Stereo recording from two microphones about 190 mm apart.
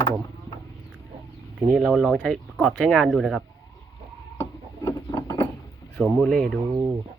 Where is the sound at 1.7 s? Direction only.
5° right (ahead or behind).